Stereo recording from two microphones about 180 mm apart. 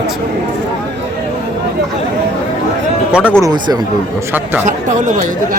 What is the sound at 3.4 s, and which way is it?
Speech, 20° right (ahead or behind).